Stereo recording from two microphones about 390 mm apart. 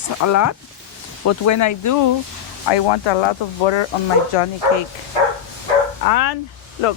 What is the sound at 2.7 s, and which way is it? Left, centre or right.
Speech, left.